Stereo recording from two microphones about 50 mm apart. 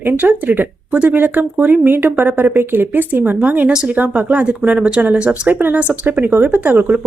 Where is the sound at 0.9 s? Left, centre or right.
Right.